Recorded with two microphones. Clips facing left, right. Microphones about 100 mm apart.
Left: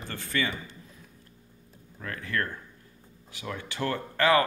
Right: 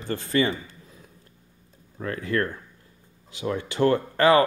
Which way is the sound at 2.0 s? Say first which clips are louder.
Right 6 dB; 30° right (ahead or behind).